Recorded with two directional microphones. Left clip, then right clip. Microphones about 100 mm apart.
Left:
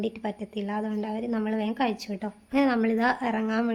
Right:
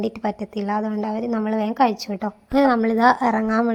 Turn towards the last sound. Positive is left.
turn(degrees=-45)  # may be behind; listen again after turning